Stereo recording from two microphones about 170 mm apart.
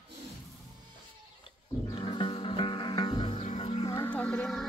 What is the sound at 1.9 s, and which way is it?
Music, 30° left (ahead or behind).